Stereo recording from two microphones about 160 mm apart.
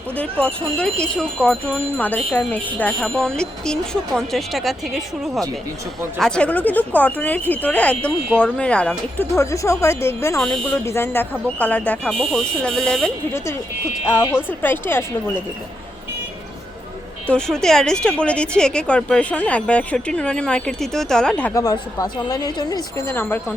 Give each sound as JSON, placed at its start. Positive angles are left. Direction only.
{"t": 0.2, "sound": "wind chime", "side_deg": 5}
{"t": 9.4, "sound": "wind chime", "side_deg": 20}
{"t": 10.4, "sound": "speech", "side_deg": 5}
{"t": 10.8, "sound": "wind chime", "side_deg": 15}
{"t": 12.3, "sound": "speech", "side_deg": 5}
{"t": 13.3, "sound": "wind chime", "side_deg": 15}
{"t": 17.3, "sound": "speech", "side_deg": 5}
{"t": 21.5, "sound": "a woman's voice", "side_deg": 20}